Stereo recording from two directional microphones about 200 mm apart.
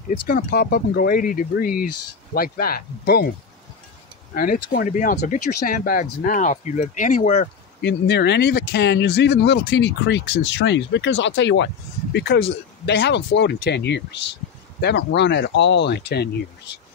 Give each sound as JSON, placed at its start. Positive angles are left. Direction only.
{"t": 0.3, "sound": "speech", "side_deg": 45}
{"t": 4.3, "sound": "speech", "side_deg": 45}
{"t": 7.8, "sound": "speech", "side_deg": 55}